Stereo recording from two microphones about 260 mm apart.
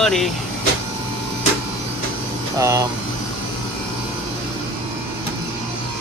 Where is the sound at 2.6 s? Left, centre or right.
Centre.